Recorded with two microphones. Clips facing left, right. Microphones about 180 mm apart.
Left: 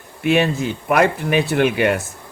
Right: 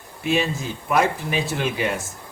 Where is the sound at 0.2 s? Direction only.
65° left (ahead or behind).